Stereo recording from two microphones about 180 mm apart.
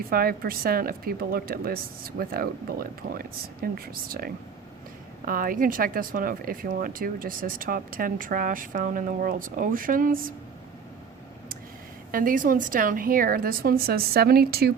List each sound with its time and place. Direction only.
0.1 s speech: 55° right (ahead or behind)
12.1 s speech: 50° right (ahead or behind)